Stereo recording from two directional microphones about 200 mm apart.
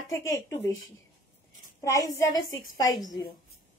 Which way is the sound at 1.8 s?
15° left (ahead or behind).